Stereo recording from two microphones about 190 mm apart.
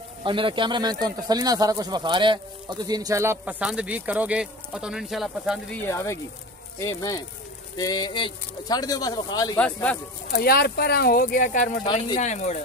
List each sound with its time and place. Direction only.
0.2 s speech: 25° right (ahead or behind); by 5.8 s centre (ahead or behind)
5.9 s speech: 15° left (ahead or behind)
9.6 s speech: 5° left (ahead or behind)
10.3 s speech: 55° left (ahead or behind)
11.8 s speech: 25° left (ahead or behind)
12.2 s speech: 40° left (ahead or behind)